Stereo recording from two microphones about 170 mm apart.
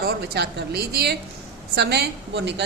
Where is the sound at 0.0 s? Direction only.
65° right (ahead or behind).